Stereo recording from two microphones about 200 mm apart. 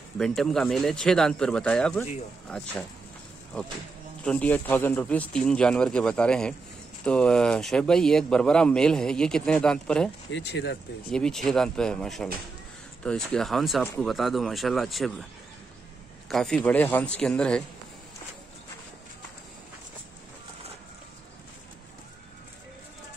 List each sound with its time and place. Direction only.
0.2 s a man's voice: centre (ahead or behind)
4.2 s a man's voice: 5° left (ahead or behind)
10.3 s speech: 55° left (ahead or behind)
11.1 s a man's voice: 5° left (ahead or behind)
16.3 s a man's voice: centre (ahead or behind)